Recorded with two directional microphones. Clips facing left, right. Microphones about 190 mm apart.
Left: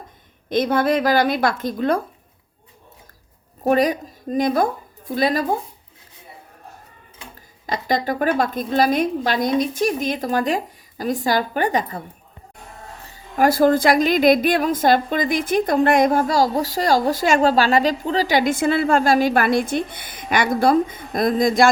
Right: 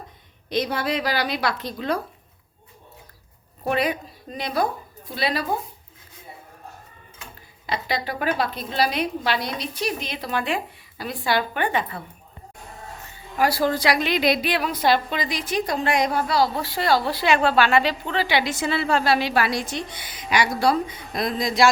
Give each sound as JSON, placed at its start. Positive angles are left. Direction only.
{"t": 0.5, "sound": "a woman's voice", "side_deg": 50}
{"t": 3.6, "sound": "a woman's voice", "side_deg": 40}
{"t": 7.7, "sound": "a woman's voice", "side_deg": 45}
{"t": 13.3, "sound": "a woman's voice", "side_deg": 50}